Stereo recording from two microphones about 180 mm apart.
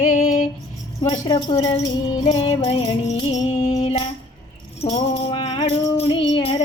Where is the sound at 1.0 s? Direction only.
25° left (ahead or behind).